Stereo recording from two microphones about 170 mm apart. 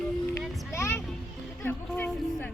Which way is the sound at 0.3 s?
15° left (ahead or behind).